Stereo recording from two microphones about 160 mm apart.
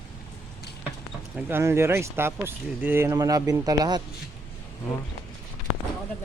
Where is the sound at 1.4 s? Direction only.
15° right (ahead or behind).